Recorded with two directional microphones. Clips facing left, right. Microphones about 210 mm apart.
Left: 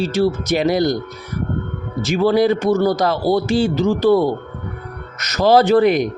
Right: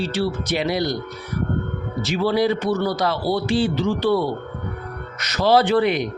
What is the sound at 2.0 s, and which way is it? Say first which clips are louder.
Speech: left 5 dB; 45° left (ahead or behind).